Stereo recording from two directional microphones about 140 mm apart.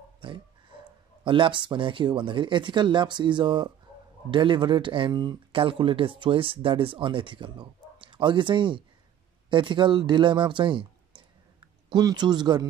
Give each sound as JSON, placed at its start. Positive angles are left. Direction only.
{"t": 0.2, "sound": "speech", "side_deg": -35}